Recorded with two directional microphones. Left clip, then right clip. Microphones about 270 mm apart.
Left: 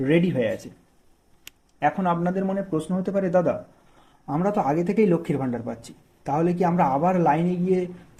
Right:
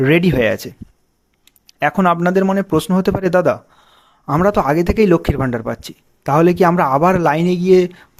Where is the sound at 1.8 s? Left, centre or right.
Right.